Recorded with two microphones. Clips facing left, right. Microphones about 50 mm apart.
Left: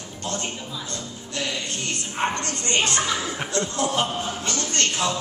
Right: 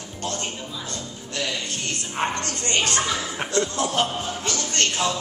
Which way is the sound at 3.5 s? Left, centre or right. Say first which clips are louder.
Right 3 dB; right.